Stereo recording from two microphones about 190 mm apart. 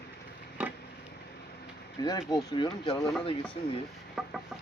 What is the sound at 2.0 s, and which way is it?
Speech, 20° left (ahead or behind).